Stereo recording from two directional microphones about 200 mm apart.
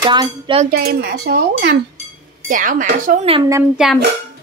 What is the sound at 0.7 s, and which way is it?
Speech, 50° right (ahead or behind).